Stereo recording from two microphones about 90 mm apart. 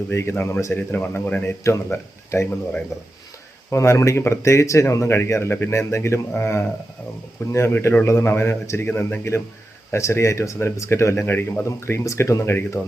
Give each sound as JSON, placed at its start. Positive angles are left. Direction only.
{"t": 0.1, "sound": "speech", "side_deg": 30}
{"t": 3.7, "sound": "speech", "side_deg": 30}